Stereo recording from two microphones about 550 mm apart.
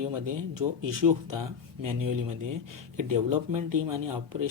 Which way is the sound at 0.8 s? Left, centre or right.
Right.